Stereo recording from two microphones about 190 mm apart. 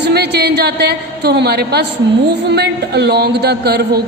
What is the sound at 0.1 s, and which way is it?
A man's voice, 60° right (ahead or behind).